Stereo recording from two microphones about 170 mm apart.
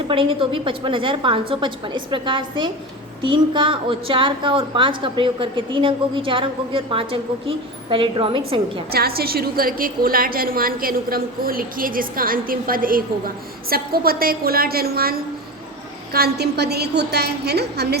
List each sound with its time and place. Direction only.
0.1 s a woman's voice: 30° right (ahead or behind)
8.9 s a woman's voice: 65° right (ahead or behind)